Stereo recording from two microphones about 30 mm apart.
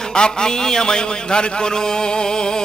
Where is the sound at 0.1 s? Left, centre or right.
Left.